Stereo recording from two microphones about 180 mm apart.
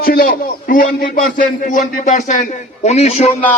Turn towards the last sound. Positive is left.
turn(degrees=40)  # may be behind; listen again after turning